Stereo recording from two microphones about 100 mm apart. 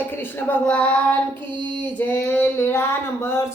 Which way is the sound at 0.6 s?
10° left (ahead or behind).